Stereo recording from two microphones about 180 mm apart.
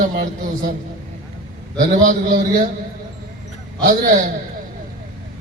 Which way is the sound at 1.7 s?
45° right (ahead or behind).